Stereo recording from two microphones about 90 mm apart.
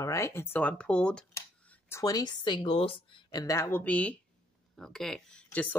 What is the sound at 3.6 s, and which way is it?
Speech, 25° left (ahead or behind).